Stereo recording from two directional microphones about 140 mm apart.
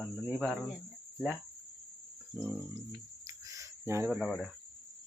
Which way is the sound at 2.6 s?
25° right (ahead or behind).